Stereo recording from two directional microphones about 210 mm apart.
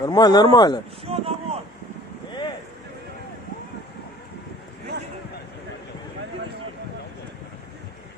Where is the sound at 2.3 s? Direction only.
20° left (ahead or behind).